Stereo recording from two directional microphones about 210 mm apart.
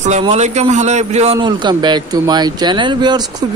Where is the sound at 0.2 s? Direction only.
30° right (ahead or behind).